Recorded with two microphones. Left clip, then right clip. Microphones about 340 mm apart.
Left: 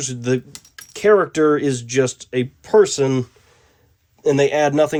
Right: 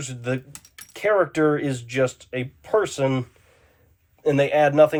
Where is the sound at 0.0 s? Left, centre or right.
Left.